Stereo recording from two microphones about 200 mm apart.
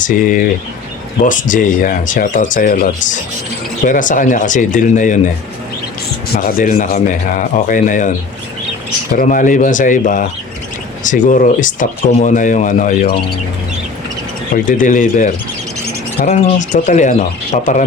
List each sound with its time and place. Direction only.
0.0 s speech: 40° left (ahead or behind)
6.4 s speech: 45° left (ahead or behind)
9.1 s speech: 40° left (ahead or behind)
14.5 s speech: 40° left (ahead or behind)